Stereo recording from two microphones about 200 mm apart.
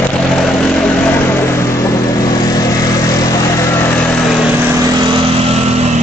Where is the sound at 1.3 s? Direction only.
10° left (ahead or behind).